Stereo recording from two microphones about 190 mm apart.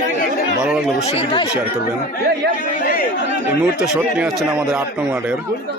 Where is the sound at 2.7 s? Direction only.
45° left (ahead or behind).